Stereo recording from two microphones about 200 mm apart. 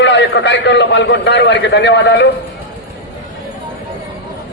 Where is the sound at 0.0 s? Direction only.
60° left (ahead or behind).